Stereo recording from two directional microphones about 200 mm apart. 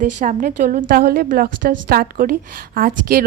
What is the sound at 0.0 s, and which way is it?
A woman's voice, 40° right (ahead or behind).